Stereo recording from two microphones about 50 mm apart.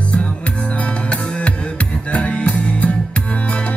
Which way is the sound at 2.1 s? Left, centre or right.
Left.